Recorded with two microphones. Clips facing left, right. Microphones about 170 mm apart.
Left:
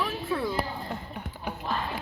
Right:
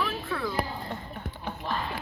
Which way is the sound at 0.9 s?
15° left (ahead or behind).